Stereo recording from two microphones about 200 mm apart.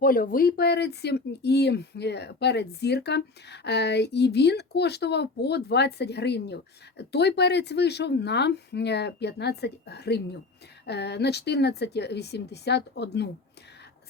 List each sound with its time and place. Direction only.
0.0 s speech: 45° left (ahead or behind)